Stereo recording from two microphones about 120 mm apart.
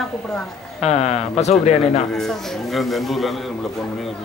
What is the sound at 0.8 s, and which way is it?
Speech, 65° left (ahead or behind).